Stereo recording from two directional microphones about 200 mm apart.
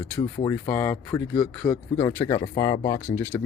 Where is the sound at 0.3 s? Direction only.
10° left (ahead or behind).